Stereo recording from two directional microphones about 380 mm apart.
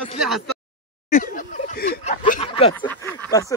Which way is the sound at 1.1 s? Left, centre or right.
Left.